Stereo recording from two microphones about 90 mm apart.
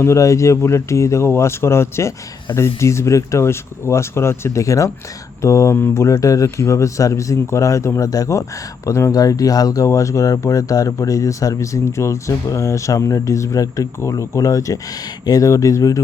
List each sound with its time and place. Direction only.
0.0 s speech: 35° left (ahead or behind)